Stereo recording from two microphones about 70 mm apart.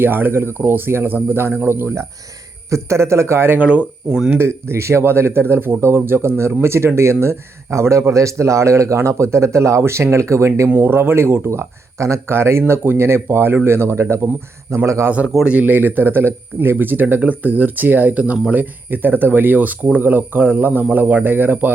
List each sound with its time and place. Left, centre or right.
0.0 s speech: right
3.6 s speech: centre
4.4 s speech: right
10.7 s speech: right
15.4 s speech: right